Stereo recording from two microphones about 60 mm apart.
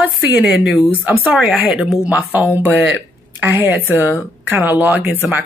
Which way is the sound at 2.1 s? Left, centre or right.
Right.